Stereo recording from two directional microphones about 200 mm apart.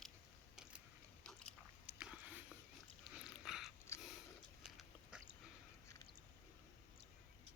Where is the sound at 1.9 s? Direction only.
5° right (ahead or behind).